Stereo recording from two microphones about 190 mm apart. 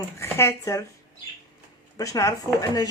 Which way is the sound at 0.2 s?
15° left (ahead or behind).